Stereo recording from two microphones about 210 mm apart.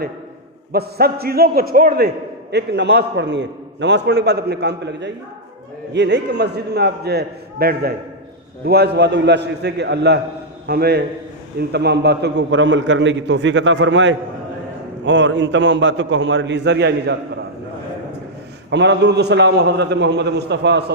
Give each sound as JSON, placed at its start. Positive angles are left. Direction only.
{"t": 0.7, "sound": "a man's voice", "side_deg": -50}
{"t": 18.7, "sound": "a man's voice", "side_deg": -55}